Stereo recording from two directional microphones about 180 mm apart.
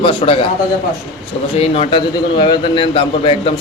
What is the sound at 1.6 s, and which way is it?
A man's voice, 30° left (ahead or behind).